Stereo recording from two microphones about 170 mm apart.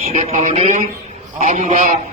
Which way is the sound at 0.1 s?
40° right (ahead or behind).